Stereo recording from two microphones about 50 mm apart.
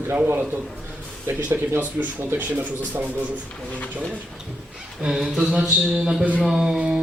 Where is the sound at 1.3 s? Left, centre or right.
Right.